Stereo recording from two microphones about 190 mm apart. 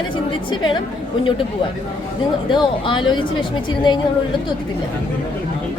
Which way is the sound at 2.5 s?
25° left (ahead or behind).